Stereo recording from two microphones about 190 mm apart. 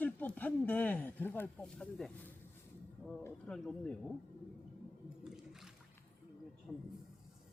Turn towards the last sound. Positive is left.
turn(degrees=0)  # may be behind; listen again after turning